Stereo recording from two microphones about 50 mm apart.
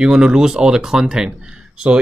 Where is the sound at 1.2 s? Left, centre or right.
Centre.